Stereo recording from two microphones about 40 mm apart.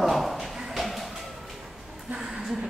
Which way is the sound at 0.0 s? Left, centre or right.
Centre.